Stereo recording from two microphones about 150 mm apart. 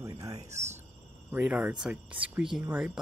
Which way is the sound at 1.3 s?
10° right (ahead or behind).